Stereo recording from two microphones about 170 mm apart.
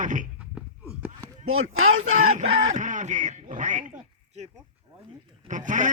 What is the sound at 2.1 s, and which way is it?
Speech, 45° right (ahead or behind).